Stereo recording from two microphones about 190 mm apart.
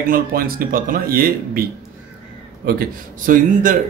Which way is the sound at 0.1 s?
50° right (ahead or behind).